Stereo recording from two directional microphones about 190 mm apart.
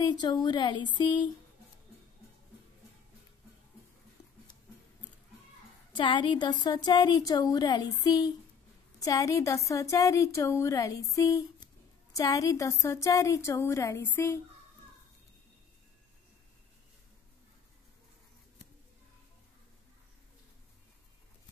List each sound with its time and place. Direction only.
0.0 s speech: 25° left (ahead or behind)
5.9 s speech: 25° left (ahead or behind)